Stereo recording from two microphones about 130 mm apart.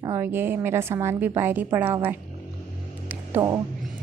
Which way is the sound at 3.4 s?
25° right (ahead or behind).